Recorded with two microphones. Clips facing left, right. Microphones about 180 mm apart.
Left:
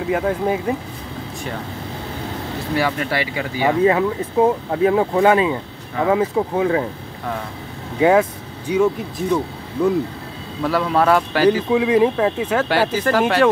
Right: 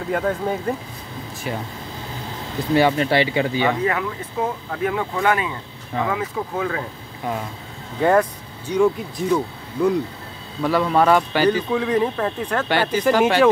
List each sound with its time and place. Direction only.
0.1 s speech: 5° left (ahead or behind)
2.7 s speech: 25° right (ahead or behind)
3.8 s speech: 30° left (ahead or behind)
8.0 s speech: 5° left (ahead or behind)